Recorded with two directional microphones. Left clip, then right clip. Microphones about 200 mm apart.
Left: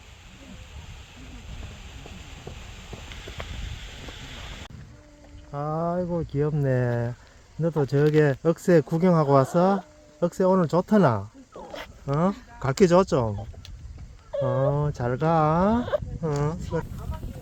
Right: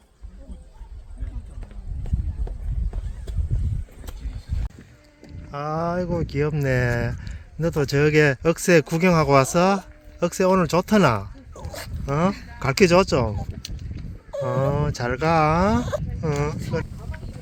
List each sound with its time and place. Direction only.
5.5 s speech: 10° right (ahead or behind)
7.9 s speech: 15° right (ahead or behind)
8.2 s speech: 5° right (ahead or behind)
14.3 s speech: 15° right (ahead or behind)
14.8 s speech: 5° right (ahead or behind)